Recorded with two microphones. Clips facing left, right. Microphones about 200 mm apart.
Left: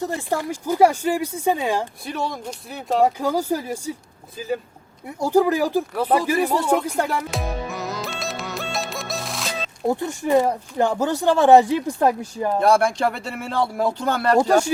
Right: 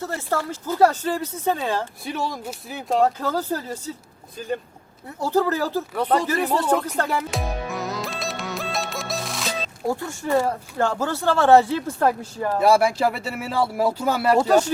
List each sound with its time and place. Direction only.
0.0 s speech: 15° left (ahead or behind)
2.0 s speech: centre (ahead or behind)
3.0 s speech: 15° left (ahead or behind)
7.1 s music: centre (ahead or behind)
9.8 s speech: 20° left (ahead or behind)
12.5 s speech: 5° right (ahead or behind)